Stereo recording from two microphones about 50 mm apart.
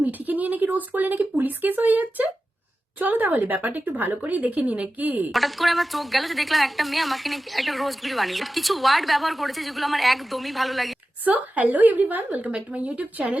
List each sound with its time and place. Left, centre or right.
0.0 s speech: right
5.3 s a woman's voice: centre
11.3 s speech: right